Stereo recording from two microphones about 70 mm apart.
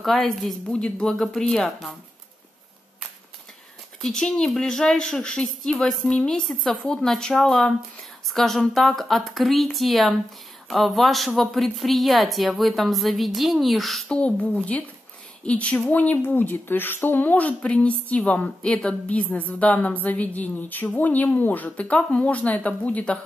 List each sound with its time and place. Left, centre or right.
0.0 s a woman's voice: centre
0.7 s a woman's voice: centre
4.0 s a woman's voice: centre
14.0 s a woman's voice: centre